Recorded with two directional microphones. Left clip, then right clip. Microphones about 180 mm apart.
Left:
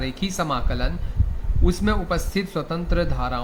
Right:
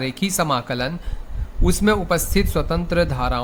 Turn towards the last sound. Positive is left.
turn(degrees=-40)  # may be behind; listen again after turning